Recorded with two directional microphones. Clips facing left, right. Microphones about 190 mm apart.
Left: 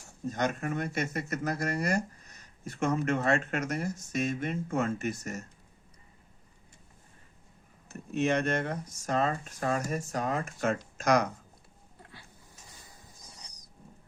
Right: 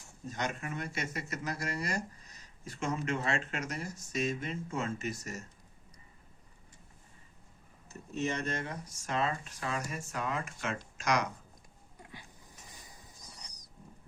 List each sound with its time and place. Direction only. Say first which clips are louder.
0.3 s speech: left 6 dB; 50° left (ahead or behind)
7.9 s speech: left 6 dB; 65° left (ahead or behind); by 11.3 s 50° left (ahead or behind)
12.7 s a sound: even; 15° right (ahead or behind)